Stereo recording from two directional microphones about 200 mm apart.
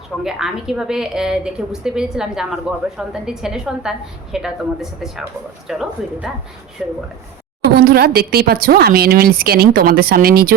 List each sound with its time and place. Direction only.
0.3 s a woman's voice: 5° right (ahead or behind)
7.8 s speech: 50° right (ahead or behind)